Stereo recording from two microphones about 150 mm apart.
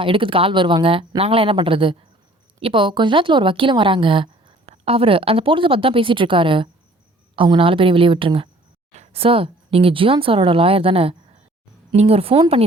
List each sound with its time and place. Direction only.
0.0 s a woman's voice: 35° right (ahead or behind)